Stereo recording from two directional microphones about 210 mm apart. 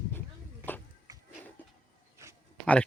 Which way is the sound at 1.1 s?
20° right (ahead or behind).